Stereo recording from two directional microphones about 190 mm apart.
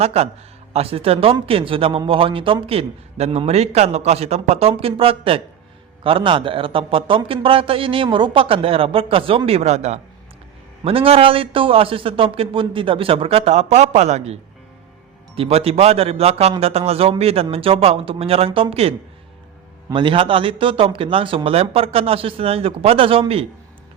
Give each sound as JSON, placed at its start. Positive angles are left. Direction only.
{"t": 0.0, "sound": "a man's voice", "side_deg": -35}
{"t": 15.4, "sound": "a man's voice", "side_deg": -30}